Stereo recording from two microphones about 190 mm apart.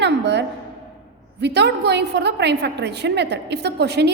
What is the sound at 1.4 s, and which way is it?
A woman's voice, 65° right (ahead or behind).